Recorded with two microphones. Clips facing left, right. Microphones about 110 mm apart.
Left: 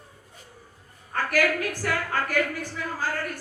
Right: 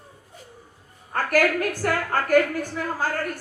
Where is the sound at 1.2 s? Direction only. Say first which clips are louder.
Right 3 dB; 50° right (ahead or behind).